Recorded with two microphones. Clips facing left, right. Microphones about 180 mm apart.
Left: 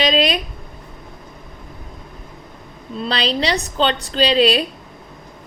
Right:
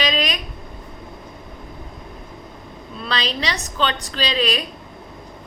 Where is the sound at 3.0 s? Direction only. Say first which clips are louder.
Left 5 dB; 30° left (ahead or behind).